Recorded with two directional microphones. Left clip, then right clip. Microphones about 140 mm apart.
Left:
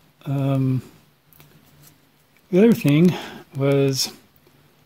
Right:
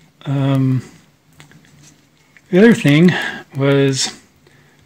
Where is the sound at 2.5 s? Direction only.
20° left (ahead or behind).